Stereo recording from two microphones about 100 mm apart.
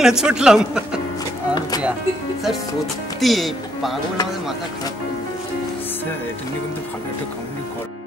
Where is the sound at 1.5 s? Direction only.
40° left (ahead or behind).